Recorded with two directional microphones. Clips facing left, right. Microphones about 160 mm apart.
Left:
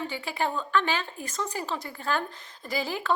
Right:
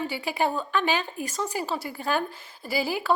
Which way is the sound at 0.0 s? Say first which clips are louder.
Right 3 dB; 10° right (ahead or behind).